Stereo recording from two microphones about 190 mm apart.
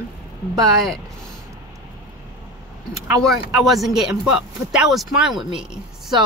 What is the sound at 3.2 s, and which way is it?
Speech, centre (ahead or behind).